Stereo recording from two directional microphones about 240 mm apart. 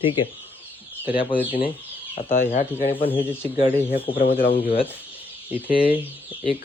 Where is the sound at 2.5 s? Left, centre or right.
Left.